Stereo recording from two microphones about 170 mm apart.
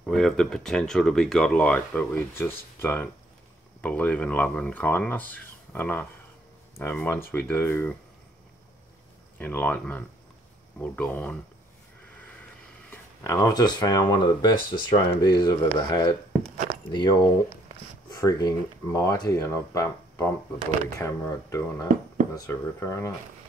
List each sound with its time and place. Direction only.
0.0 s speech: centre (ahead or behind)
9.4 s speech: 10° left (ahead or behind)
12.9 s speech: 15° left (ahead or behind)